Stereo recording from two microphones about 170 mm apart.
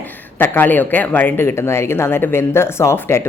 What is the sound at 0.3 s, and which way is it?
Speech, 10° left (ahead or behind).